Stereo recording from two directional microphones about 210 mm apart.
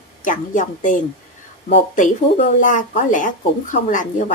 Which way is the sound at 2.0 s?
35° left (ahead or behind).